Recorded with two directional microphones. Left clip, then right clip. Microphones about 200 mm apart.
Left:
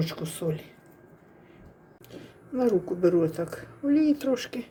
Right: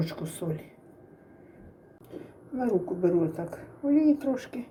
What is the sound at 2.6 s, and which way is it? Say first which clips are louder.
Speech: left 3 dB; 20° left (ahead or behind).